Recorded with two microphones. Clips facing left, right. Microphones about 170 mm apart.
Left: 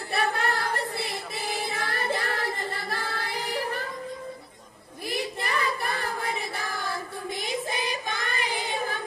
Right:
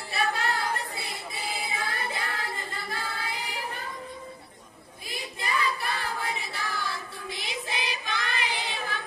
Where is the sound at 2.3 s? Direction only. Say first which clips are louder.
Left 5 dB; 70° left (ahead or behind).